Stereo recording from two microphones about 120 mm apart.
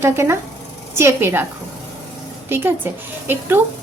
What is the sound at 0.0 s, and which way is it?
A woman's voice, 20° right (ahead or behind).